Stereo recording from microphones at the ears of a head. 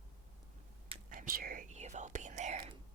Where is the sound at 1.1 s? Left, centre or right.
Right.